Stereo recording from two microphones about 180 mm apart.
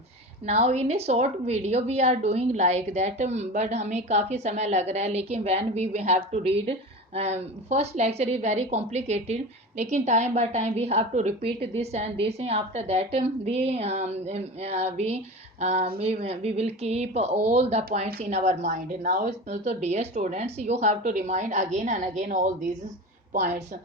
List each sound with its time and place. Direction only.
0.4 s a woman's voice: 35° right (ahead or behind)